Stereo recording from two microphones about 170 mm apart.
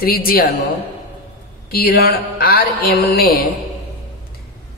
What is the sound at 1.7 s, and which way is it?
A woman's voice, 65° left (ahead or behind).